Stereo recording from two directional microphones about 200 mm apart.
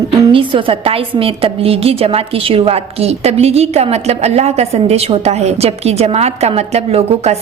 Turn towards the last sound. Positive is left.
turn(degrees=-30)  # may be behind; listen again after turning